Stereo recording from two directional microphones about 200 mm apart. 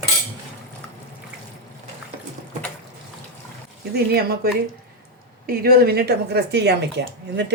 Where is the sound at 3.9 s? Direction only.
50° right (ahead or behind).